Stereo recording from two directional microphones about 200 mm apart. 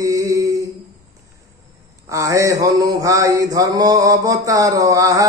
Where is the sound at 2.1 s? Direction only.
15° right (ahead or behind).